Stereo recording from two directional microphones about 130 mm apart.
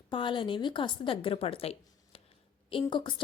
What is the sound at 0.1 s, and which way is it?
A woman's voice, 40° left (ahead or behind).